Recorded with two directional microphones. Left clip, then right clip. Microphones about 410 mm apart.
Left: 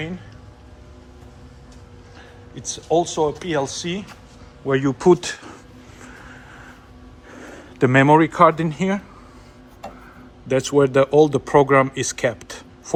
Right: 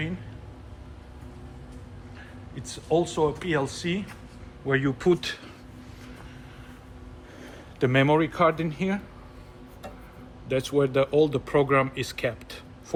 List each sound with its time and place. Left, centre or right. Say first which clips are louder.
2.6 s speech: left 6 dB; centre
6.0 s music: left 8 dB; left
7.3 s speech: left 7 dB; left
10.5 s speech: left 7 dB; centre